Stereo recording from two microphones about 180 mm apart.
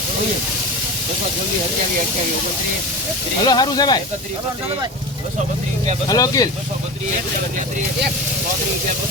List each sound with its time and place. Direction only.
3.4 s speech: 20° left (ahead or behind)
6.1 s speech: 20° left (ahead or behind)